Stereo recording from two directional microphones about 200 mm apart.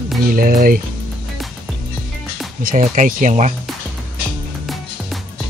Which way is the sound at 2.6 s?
45° right (ahead or behind).